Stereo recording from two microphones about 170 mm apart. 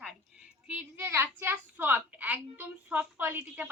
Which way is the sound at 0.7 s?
10° right (ahead or behind).